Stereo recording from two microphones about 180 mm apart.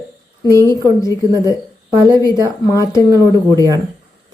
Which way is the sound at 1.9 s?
25° right (ahead or behind).